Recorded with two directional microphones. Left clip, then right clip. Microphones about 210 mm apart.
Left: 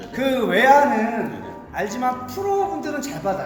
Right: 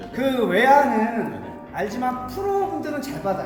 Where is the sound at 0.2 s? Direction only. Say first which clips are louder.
Left 1 dB; 10° left (ahead or behind).